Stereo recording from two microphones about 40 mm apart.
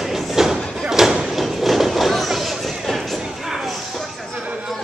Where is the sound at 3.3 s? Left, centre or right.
Centre.